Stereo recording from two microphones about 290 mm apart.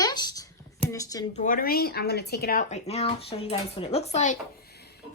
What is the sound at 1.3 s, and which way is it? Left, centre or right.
Speech, left.